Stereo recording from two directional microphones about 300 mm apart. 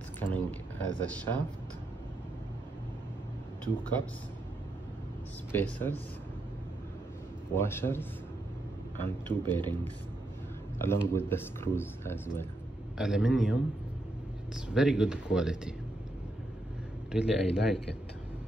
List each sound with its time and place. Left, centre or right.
0.2 s a sound: centre
3.6 s speech: centre
5.5 s speech: centre
7.5 s speech: centre
11.1 s speech: centre
17.1 s speech: centre